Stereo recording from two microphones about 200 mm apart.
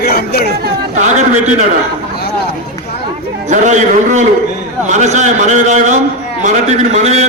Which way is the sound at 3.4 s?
40° right (ahead or behind).